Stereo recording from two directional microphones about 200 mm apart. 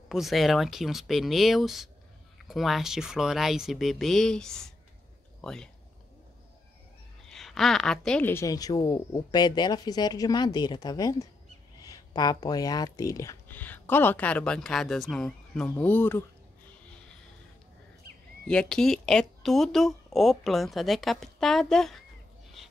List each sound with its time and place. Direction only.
0.1 s speech: centre (ahead or behind)
7.2 s a woman's voice: centre (ahead or behind)
18.5 s speech: 5° left (ahead or behind)